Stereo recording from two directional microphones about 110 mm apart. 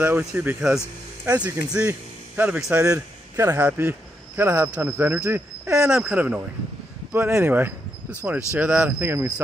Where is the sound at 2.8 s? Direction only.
25° right (ahead or behind).